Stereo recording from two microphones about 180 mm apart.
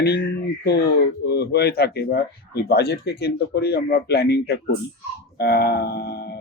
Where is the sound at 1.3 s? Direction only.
65° left (ahead or behind).